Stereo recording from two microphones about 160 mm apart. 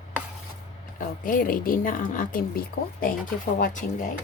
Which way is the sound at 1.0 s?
60° left (ahead or behind).